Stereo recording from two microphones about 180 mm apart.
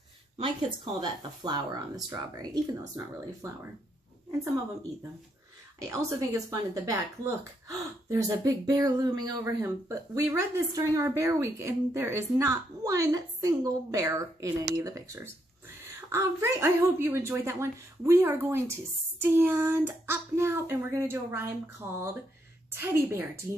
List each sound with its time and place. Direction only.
0.4 s speech: 30° right (ahead or behind)
5.8 s speech: 15° right (ahead or behind)